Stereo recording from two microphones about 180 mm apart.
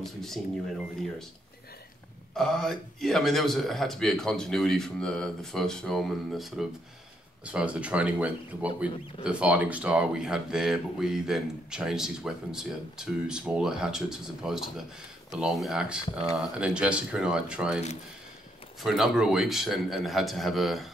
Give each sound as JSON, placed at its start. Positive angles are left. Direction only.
{"t": 0.0, "sound": "speech", "side_deg": 0}
{"t": 2.3, "sound": "speech", "side_deg": 0}
{"t": 18.8, "sound": "speech", "side_deg": 0}